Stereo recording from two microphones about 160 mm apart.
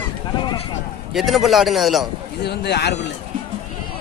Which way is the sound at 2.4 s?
90° left.